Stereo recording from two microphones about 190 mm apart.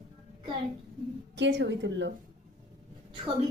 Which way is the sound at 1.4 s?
65° right (ahead or behind).